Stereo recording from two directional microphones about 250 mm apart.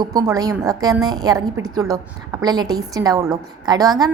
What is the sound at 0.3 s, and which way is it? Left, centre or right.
A woman's voice, centre.